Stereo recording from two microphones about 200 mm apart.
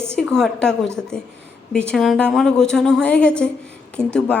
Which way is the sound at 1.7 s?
5° left (ahead or behind).